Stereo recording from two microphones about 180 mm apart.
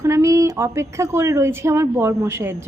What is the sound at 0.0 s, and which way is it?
A woman's voice, 15° right (ahead or behind).